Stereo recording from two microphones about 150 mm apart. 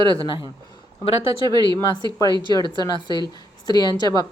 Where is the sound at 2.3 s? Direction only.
30° right (ahead or behind).